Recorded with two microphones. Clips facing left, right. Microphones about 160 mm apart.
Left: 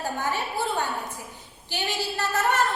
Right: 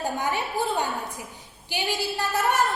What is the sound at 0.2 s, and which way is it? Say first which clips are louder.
A woman's voice: right 1 dB; 15° right (ahead or behind).